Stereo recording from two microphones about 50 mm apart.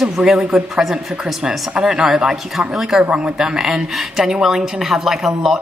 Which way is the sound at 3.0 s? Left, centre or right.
Right.